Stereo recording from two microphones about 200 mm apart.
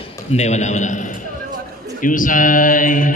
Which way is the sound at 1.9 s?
40° left (ahead or behind).